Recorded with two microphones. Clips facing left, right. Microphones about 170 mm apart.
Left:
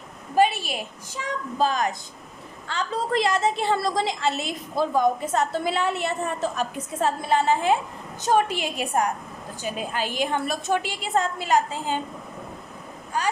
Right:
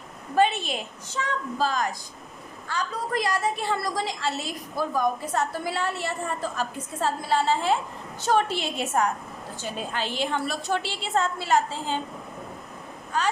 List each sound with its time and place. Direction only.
0.4 s a woman's voice: 10° left (ahead or behind)